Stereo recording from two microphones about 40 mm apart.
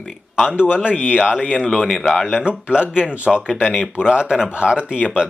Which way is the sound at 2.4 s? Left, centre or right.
Right.